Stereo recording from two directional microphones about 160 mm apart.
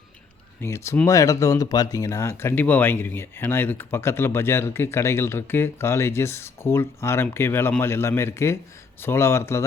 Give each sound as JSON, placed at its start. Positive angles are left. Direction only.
{"t": 0.6, "sound": "speech", "side_deg": 15}